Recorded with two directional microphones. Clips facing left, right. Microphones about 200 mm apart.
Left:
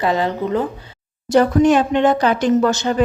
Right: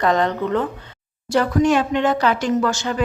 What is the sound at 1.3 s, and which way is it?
A woman's voice, 20° left (ahead or behind).